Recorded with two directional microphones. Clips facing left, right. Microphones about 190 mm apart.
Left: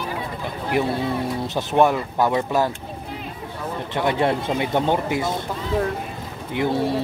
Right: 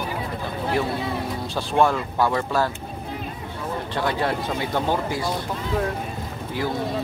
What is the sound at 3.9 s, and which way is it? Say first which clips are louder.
Speech: left 4 dB; 20° left (ahead or behind).